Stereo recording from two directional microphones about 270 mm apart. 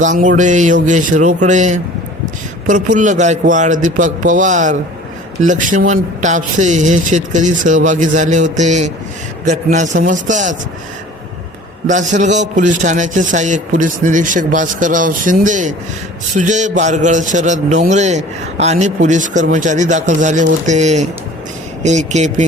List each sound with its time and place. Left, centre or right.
0.0 s a man's voice: right
11.9 s a man's voice: right